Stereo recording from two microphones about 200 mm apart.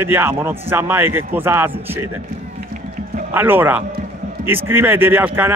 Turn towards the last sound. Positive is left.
turn(degrees=-10)  # may be behind; listen again after turning